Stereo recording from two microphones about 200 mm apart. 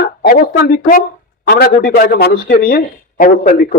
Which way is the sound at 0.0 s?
50° left (ahead or behind).